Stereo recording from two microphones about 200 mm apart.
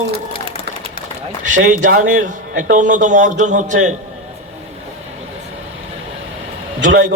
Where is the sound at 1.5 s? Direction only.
40° right (ahead or behind).